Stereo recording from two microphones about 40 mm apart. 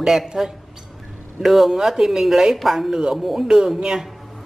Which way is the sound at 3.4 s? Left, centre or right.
Centre.